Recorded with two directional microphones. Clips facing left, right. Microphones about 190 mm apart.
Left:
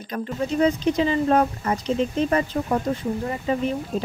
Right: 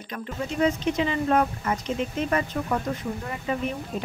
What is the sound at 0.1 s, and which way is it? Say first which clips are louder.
Speech: left 6 dB; 35° left (ahead or behind).